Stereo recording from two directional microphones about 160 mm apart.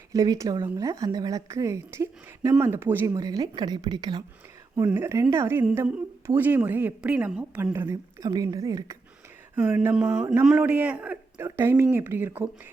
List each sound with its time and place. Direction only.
0.1 s a woman's voice: 20° right (ahead or behind)
4.9 s a woman's voice: 15° right (ahead or behind)